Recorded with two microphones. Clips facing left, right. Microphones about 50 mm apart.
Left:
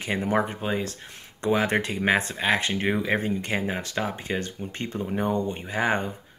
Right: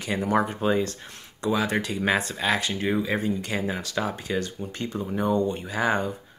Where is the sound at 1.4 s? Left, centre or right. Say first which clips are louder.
Left 2 dB; left.